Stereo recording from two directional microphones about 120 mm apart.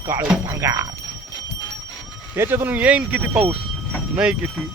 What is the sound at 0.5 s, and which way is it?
Speech, 25° right (ahead or behind).